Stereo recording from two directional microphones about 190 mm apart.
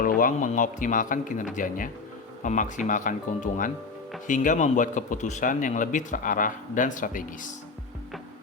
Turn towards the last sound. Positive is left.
turn(degrees=45)  # may be behind; listen again after turning